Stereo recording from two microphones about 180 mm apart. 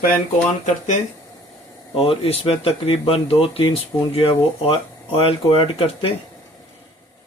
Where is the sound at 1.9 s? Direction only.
30° left (ahead or behind).